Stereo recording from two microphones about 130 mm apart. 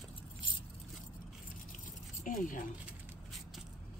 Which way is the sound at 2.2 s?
90° left.